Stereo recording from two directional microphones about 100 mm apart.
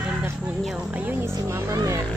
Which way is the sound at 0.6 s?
5° right (ahead or behind).